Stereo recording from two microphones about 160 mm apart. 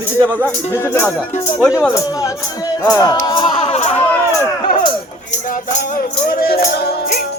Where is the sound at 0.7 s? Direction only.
15° left (ahead or behind).